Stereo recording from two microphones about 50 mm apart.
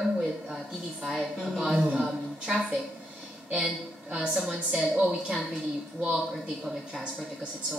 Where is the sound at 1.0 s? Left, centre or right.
Centre.